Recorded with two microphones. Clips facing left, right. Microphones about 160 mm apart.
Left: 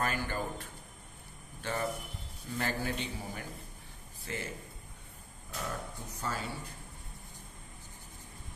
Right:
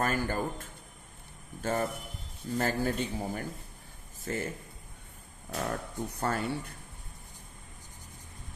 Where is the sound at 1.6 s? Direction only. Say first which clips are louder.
Right 4 dB; 45° right (ahead or behind).